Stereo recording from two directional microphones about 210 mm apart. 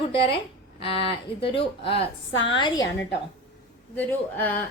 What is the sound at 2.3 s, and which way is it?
Speech, 60° left (ahead or behind).